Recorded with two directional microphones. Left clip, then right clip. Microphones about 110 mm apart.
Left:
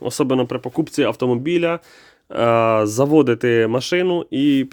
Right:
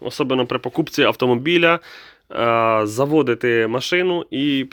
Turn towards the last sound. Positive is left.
turn(degrees=45)  # may be behind; listen again after turning